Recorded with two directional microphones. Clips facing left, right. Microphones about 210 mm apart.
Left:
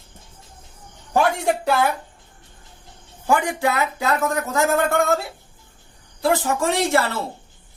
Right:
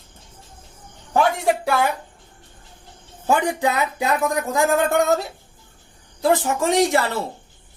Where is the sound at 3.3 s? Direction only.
20° right (ahead or behind).